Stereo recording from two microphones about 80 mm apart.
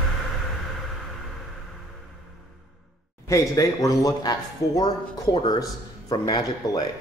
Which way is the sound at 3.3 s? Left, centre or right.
Left.